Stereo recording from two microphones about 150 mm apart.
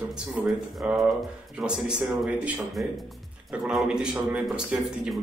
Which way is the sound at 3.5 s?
5° right (ahead or behind).